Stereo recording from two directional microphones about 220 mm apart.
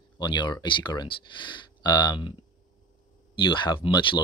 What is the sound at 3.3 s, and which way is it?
Speech, 20° left (ahead or behind).